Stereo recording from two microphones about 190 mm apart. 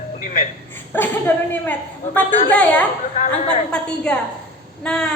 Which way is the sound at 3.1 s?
40° left (ahead or behind).